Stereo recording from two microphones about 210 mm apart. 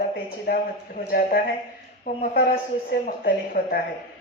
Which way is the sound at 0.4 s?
45° left (ahead or behind).